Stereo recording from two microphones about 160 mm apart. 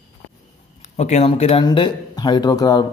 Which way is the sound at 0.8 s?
45° left (ahead or behind).